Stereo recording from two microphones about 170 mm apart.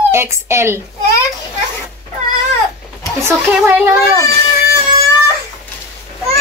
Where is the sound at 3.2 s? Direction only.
10° right (ahead or behind).